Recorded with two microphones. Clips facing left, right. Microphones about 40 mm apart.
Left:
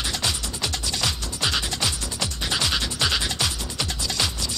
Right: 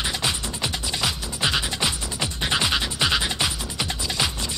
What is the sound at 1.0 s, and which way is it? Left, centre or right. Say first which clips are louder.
Music: right 2 dB; centre.